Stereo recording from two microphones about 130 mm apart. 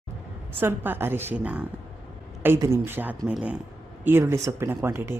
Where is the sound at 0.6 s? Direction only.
15° right (ahead or behind).